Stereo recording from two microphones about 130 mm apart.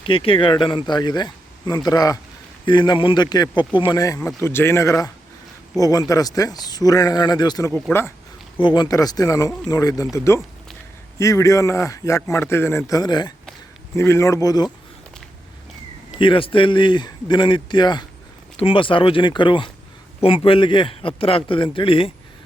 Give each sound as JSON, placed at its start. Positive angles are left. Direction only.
{"t": 0.0, "sound": "a man's voice", "side_deg": 45}
{"t": 13.9, "sound": "a man's voice", "side_deg": 20}
{"t": 16.2, "sound": "a man's voice", "side_deg": 40}